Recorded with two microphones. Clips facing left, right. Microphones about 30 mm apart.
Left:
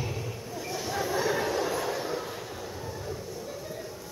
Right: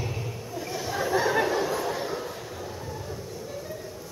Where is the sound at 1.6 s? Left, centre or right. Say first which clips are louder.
Right 2 dB; centre.